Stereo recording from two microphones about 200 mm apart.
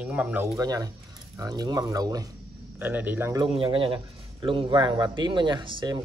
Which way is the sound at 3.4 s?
25° right (ahead or behind).